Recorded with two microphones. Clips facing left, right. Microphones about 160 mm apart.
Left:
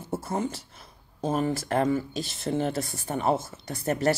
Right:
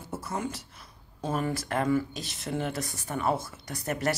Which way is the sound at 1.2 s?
25° left (ahead or behind).